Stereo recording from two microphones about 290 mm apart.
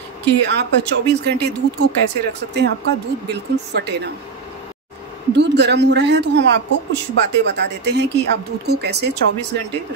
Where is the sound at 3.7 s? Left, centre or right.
Right.